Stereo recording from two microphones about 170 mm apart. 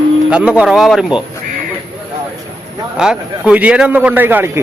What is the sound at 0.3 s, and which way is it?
Speech, 5° right (ahead or behind).